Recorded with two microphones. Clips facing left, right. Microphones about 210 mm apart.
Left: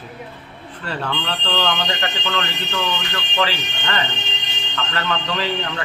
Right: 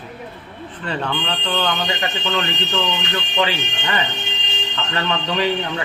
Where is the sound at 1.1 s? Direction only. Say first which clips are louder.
Right 1 dB; 10° right (ahead or behind).